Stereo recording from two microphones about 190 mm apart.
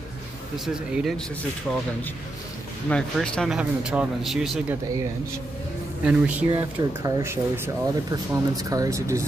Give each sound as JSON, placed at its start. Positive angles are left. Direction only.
{"t": 0.9, "sound": "speech", "side_deg": 0}
{"t": 2.9, "sound": "speech", "side_deg": 5}
{"t": 6.0, "sound": "speech", "side_deg": -5}